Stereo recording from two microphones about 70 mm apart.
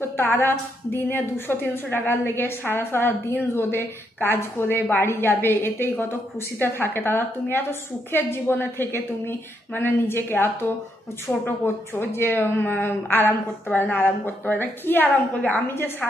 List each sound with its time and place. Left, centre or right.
0.2 s a woman's voice: left